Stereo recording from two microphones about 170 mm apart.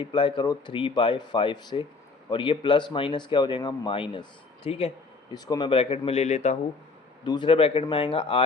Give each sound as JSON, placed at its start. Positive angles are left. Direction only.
{"t": 0.0, "sound": "speech", "side_deg": 30}
{"t": 5.3, "sound": "speech", "side_deg": 25}
{"t": 7.3, "sound": "speech", "side_deg": 25}